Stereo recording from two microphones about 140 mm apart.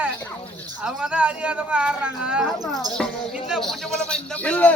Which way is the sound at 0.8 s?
10° right (ahead or behind).